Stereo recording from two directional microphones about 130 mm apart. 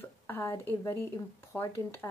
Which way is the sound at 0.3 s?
20° left (ahead or behind).